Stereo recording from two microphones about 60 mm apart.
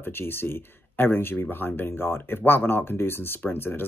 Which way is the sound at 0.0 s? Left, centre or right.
Left.